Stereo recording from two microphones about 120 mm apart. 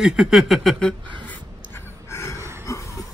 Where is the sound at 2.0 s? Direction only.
25° left (ahead or behind).